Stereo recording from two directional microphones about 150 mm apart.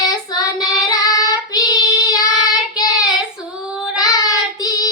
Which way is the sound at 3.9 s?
25° left (ahead or behind).